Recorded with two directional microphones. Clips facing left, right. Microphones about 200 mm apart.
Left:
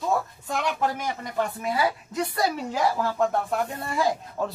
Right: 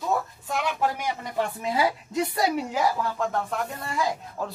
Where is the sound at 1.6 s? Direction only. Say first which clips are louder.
Even; 25° right (ahead or behind).